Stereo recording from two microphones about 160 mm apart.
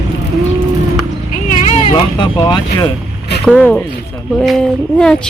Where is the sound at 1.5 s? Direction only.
50° left (ahead or behind).